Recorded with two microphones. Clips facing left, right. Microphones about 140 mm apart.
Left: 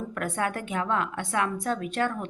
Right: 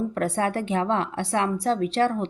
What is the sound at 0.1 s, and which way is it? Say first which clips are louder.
A woman's voice: right 5 dB; 35° right (ahead or behind).